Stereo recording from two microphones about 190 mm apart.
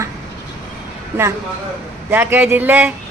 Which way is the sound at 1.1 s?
10° right (ahead or behind).